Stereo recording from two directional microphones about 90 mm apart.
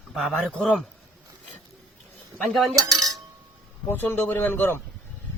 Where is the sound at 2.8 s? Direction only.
40° right (ahead or behind).